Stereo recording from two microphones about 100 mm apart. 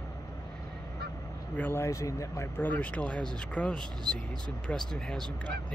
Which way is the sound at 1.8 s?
30° left (ahead or behind).